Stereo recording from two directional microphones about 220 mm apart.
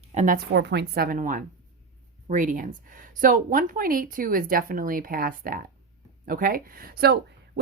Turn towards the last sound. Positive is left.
turn(degrees=-45)  # may be behind; listen again after turning